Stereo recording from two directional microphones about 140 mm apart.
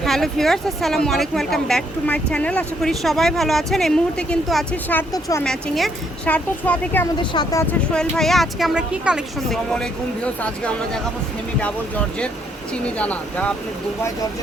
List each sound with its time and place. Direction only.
0.0 s a woman's voice: centre (ahead or behind)
7.2 s speech: 30° left (ahead or behind)
7.7 s a woman's voice: 5° left (ahead or behind)
10.4 s speech: 10° left (ahead or behind)
13.0 s speech: 10° left (ahead or behind)